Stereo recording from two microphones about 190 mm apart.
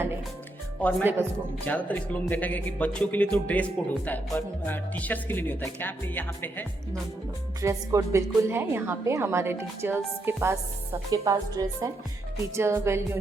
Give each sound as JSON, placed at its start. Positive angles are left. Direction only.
{"t": 0.8, "sound": "speech", "side_deg": 10}
{"t": 7.6, "sound": "a woman's voice", "side_deg": -15}